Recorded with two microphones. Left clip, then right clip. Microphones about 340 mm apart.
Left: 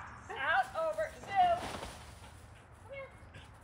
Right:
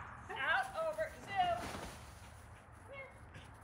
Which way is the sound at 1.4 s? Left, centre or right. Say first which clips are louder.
Left 7 dB; centre.